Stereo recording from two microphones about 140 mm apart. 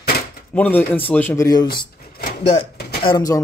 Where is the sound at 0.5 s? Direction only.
15° left (ahead or behind).